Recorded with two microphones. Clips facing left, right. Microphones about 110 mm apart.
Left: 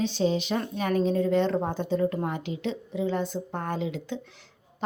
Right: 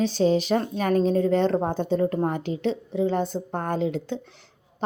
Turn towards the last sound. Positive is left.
turn(degrees=-40)  # may be behind; listen again after turning